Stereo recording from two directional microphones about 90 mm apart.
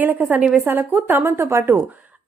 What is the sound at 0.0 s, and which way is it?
Speech, 20° right (ahead or behind).